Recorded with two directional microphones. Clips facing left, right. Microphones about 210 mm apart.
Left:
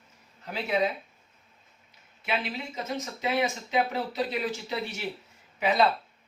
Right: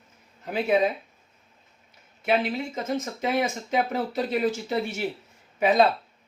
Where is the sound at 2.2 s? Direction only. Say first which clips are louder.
Right 7 dB; 45° right (ahead or behind).